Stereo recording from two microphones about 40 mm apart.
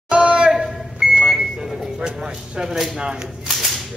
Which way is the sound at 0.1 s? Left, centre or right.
Right.